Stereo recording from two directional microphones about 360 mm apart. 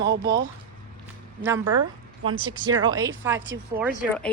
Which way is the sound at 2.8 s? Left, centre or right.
Centre.